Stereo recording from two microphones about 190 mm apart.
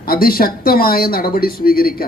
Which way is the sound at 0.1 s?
50° left (ahead or behind).